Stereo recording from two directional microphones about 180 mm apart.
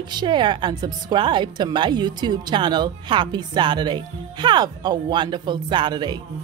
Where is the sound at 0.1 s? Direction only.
25° right (ahead or behind).